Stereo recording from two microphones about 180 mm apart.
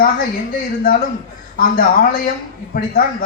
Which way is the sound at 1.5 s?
50° left (ahead or behind).